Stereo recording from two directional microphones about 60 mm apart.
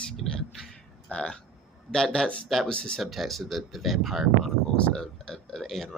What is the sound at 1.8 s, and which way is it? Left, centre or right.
Speech, centre.